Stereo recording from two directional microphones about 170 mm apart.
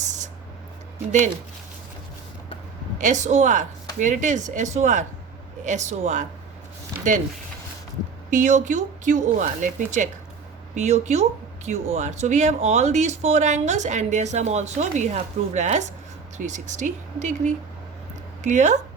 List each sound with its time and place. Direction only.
0.0 s a sound: 45° right (ahead or behind)
3.0 s speech: 45° right (ahead or behind)
8.3 s speech: 45° right (ahead or behind)